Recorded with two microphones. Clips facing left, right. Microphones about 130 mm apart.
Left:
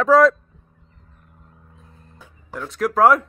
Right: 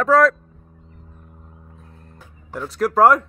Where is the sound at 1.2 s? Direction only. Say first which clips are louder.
Right 5 dB; 15° right (ahead or behind).